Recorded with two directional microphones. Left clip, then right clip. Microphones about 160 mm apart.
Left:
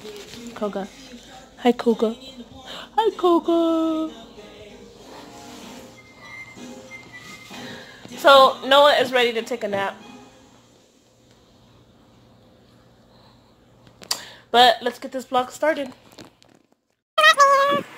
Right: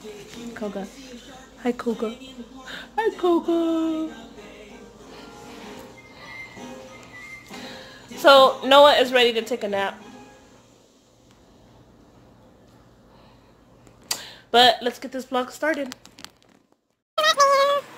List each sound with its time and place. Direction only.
1.6 s a woman's voice: 25° left (ahead or behind)
2.6 s speech: 5° left (ahead or behind)
7.6 s a sound: 20° right (ahead or behind)
9.0 s a woman's voice: 15° right (ahead or behind)
14.0 s speech: 10° right (ahead or behind)
17.2 s cat: 5° right (ahead or behind)